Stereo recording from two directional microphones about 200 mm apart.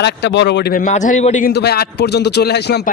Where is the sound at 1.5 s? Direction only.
55° left (ahead or behind).